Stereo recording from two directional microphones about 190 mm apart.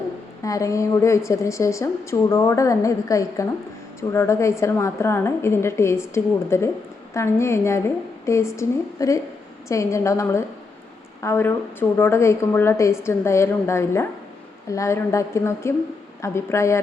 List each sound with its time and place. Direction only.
0.4 s a woman's voice: 15° left (ahead or behind)